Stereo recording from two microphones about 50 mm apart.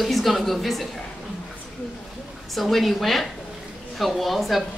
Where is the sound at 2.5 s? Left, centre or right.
Centre.